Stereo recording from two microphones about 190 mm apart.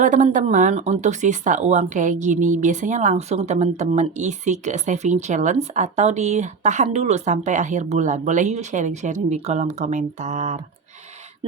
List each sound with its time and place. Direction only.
0.0 s speech: 40° right (ahead or behind)